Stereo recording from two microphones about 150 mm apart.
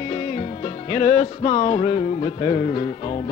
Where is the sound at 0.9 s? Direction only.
40° left (ahead or behind).